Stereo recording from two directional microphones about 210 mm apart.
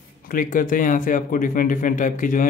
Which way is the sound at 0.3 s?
40° left (ahead or behind).